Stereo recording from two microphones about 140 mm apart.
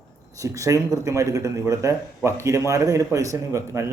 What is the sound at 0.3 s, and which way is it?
Speech, 20° right (ahead or behind).